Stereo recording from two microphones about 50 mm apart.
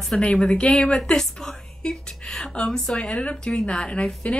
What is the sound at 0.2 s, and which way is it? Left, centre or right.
Speech, centre.